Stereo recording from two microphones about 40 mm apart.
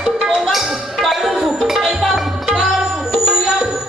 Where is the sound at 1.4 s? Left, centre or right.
Centre.